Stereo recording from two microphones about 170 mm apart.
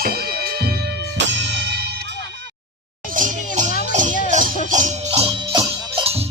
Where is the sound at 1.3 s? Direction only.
90° right.